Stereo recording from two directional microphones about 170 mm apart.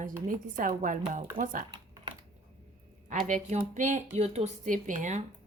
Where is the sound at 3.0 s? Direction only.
45° right (ahead or behind).